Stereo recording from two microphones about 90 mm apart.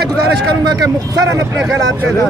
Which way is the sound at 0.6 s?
45° right (ahead or behind).